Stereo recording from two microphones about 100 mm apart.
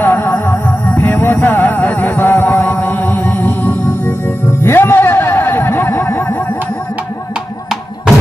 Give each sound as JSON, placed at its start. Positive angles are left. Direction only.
{"t": 0.0, "sound": "music", "side_deg": 25}